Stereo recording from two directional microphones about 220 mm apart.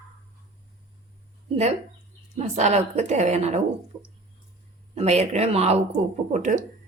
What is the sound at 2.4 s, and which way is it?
A woman's voice, 30° right (ahead or behind).